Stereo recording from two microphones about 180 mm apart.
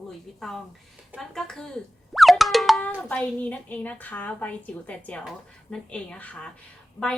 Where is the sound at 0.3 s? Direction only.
Centre (ahead or behind).